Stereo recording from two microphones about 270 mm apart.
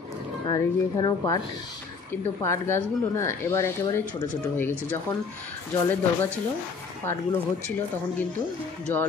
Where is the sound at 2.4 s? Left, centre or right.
Centre.